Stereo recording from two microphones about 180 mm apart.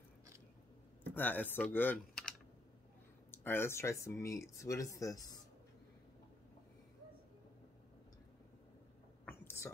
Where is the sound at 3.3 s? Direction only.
10° left (ahead or behind).